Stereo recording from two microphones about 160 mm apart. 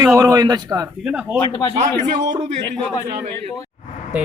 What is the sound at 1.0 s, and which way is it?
Speech, 5° right (ahead or behind).